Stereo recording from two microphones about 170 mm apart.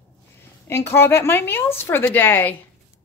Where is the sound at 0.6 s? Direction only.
15° left (ahead or behind).